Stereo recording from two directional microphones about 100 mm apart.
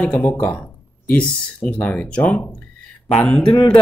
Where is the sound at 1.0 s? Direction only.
15° left (ahead or behind).